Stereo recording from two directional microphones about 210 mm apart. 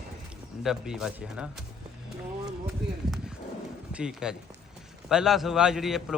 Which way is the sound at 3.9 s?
5° right (ahead or behind).